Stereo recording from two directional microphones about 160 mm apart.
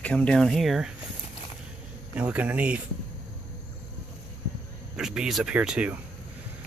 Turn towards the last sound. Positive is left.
turn(degrees=-5)  # may be behind; listen again after turning